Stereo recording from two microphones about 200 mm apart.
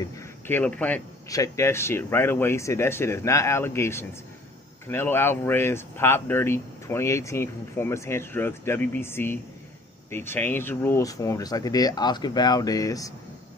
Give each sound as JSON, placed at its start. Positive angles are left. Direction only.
{"t": 0.0, "sound": "speech", "side_deg": 10}